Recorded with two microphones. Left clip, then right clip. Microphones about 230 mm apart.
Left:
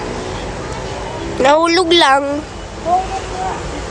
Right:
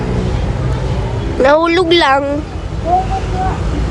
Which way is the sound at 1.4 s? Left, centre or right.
Centre.